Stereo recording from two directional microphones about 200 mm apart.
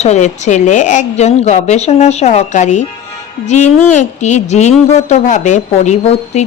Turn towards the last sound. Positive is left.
turn(degrees=35)  # may be behind; listen again after turning